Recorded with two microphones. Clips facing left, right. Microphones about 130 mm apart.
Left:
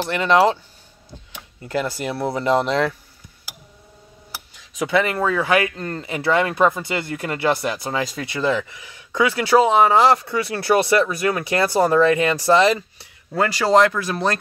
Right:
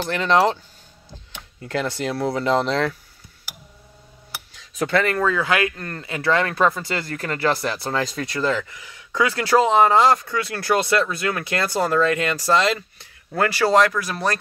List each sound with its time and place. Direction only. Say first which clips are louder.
1.3 s speech: left 2 dB; 10° left (ahead or behind)
4.7 s speech: left 1 dB; 10° left (ahead or behind)
9.9 s speech: left 1 dB; 25° left (ahead or behind)
10.6 s speech: left 3 dB; 15° left (ahead or behind)